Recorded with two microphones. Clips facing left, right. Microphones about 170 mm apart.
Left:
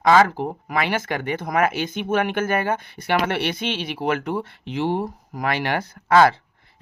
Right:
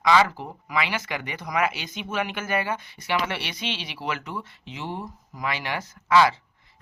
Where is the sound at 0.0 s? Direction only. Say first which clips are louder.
Left 4 dB; 45° left (ahead or behind).